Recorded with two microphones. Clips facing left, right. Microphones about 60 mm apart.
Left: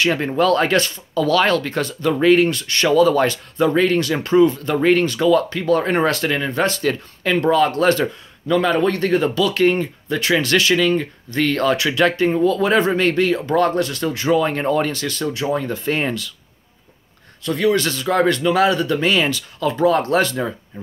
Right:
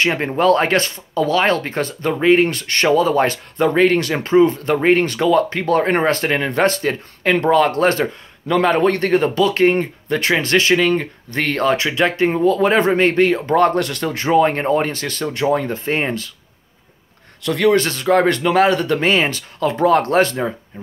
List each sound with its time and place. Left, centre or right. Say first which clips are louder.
0.0 s speech: right 1 dB; right
1.2 s speech: even; right
2.1 s speech: even; right
2.4 s speech: right 1 dB; right
3.0 s speech: left 1 dB; right
3.5 s speech: right 2 dB; right
4.2 s speech: right 1 dB; right
5.0 s speech: even; right
6.4 s speech: right 2 dB; right
8.5 s speech: right 2 dB; right
11.5 s speech: right 3 dB; right
17.4 s speech: right 3 dB; right
17.7 s speech: right 3 dB; right